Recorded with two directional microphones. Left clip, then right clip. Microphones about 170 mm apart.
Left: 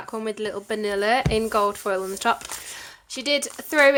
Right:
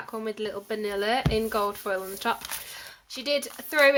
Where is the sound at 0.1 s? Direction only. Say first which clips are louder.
Left 4 dB; 30° left (ahead or behind).